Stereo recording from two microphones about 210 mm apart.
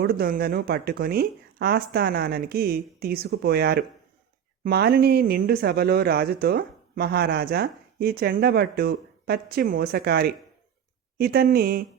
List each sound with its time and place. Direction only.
0.0 s speech: 45° right (ahead or behind)